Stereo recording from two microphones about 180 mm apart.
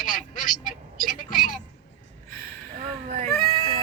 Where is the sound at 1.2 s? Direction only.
50° left (ahead or behind).